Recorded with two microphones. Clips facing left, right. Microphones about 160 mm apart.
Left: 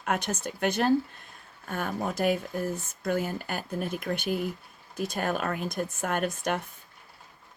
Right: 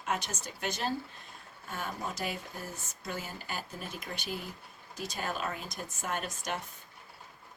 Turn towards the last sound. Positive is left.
turn(degrees=55)  # may be behind; listen again after turning